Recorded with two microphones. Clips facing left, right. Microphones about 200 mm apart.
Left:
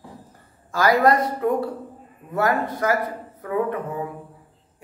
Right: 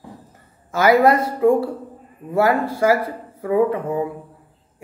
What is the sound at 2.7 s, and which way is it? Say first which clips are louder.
Speech: right 5 dB; 25° right (ahead or behind).